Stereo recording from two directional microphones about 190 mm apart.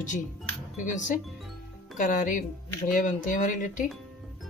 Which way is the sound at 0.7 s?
40° left (ahead or behind).